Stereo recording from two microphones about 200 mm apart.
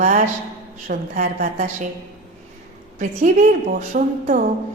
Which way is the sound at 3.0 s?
40° right (ahead or behind).